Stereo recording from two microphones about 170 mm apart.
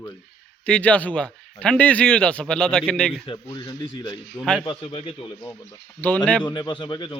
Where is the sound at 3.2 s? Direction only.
25° left (ahead or behind).